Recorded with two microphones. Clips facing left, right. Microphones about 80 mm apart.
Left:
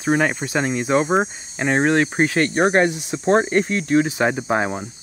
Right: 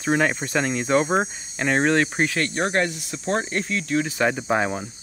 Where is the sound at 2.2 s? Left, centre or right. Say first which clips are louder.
Left 6 dB; left.